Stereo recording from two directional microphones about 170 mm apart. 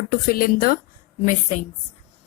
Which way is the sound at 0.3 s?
55° left (ahead or behind).